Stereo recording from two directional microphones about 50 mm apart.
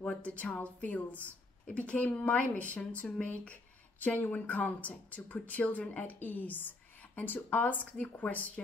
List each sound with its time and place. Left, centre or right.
0.2 s a woman's voice: left